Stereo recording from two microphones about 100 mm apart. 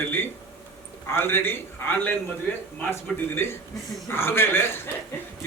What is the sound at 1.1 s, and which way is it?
A man's voice, 25° left (ahead or behind).